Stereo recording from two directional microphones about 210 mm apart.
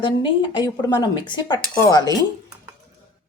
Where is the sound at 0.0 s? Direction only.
25° left (ahead or behind).